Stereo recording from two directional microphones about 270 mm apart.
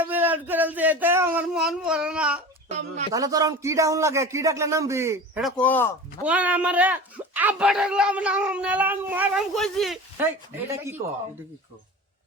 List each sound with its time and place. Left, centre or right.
0.0 s a sound: centre
2.6 s speech: right
3.1 s speech: centre
6.2 s speech: centre